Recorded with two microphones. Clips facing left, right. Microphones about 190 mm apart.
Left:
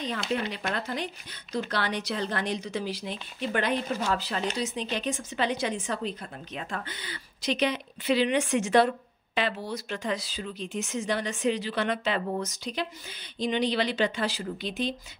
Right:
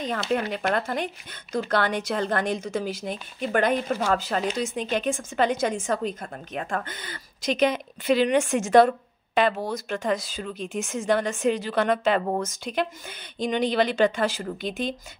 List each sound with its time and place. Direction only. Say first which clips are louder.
0.3 s a woman's voice: right 7 dB; 55° right (ahead or behind)